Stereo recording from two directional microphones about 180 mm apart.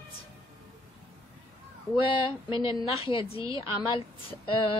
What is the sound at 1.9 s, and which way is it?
A woman's voice, 30° left (ahead or behind).